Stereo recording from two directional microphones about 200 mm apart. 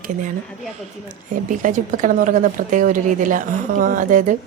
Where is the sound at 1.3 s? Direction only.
40° right (ahead or behind).